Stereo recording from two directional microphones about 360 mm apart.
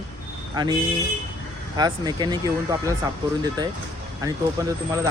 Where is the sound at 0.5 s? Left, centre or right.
Centre.